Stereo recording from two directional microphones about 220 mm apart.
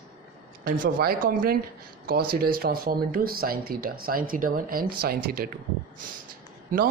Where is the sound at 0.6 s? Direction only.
40° right (ahead or behind).